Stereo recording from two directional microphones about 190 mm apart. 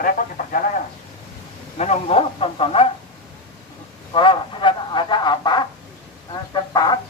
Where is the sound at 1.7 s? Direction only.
35° left (ahead or behind).